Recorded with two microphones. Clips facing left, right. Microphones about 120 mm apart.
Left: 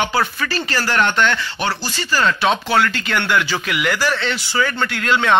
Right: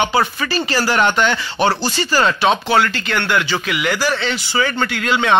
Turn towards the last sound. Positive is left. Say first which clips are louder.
# even
turn(degrees=-5)  # may be behind; listen again after turning